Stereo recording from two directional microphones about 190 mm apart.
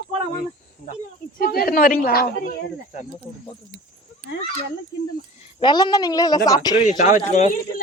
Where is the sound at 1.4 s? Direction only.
50° left (ahead or behind).